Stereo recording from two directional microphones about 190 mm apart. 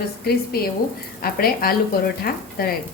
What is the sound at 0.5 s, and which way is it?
A woman's voice, 55° left (ahead or behind).